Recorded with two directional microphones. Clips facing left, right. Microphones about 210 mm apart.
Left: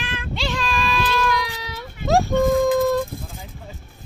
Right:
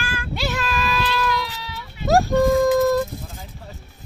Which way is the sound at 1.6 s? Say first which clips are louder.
Left 2 dB; 45° left (ahead or behind).